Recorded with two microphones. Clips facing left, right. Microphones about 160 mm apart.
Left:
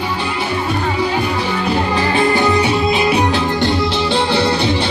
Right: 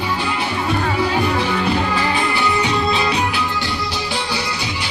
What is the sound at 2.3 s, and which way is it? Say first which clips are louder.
Music: left 6 dB; 40° left (ahead or behind).